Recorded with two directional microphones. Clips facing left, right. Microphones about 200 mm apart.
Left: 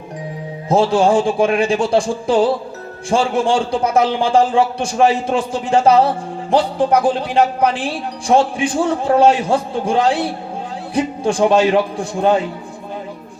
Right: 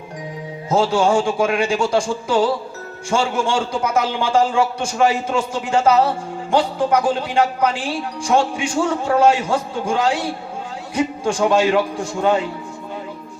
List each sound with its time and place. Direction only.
0.7 s a man's voice: 30° left (ahead or behind)